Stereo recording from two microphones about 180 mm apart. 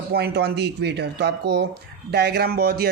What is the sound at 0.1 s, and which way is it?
Speech, 60° right (ahead or behind).